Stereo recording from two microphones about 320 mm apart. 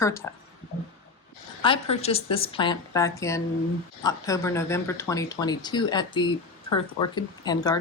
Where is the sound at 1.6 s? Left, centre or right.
Centre.